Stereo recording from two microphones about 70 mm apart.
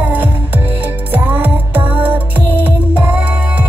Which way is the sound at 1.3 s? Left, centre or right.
Right.